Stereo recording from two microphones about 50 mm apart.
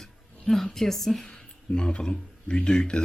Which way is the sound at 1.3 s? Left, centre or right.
Left.